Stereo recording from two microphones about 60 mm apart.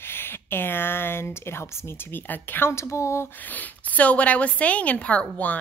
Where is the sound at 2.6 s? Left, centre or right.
Left.